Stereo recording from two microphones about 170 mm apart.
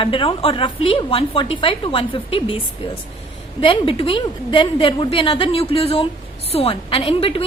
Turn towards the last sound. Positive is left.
turn(degrees=30)  # may be behind; listen again after turning